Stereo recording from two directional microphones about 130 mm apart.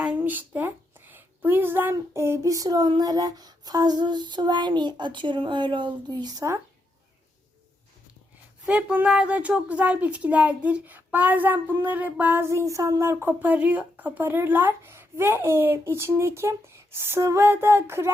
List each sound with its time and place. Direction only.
0.0 s a sound: 10° right (ahead or behind)
1.1 s child singing: 15° right (ahead or behind)
8.6 s a woman's voice: 10° right (ahead or behind)